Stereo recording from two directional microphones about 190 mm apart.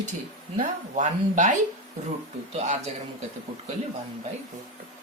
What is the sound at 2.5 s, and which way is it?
Speech, 35° right (ahead or behind).